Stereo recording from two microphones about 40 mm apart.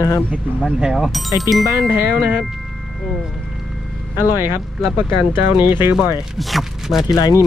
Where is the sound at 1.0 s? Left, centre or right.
Centre.